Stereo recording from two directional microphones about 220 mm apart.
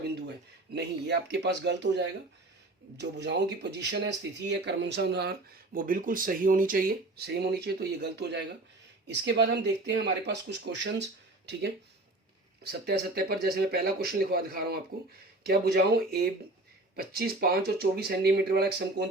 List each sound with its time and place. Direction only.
0.7 s speech: 50° right (ahead or behind)
12.8 s speech: 45° right (ahead or behind)